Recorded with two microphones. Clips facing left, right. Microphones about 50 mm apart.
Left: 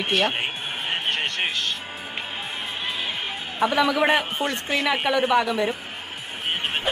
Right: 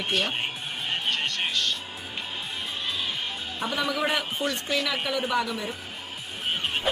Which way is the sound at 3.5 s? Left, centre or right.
Left.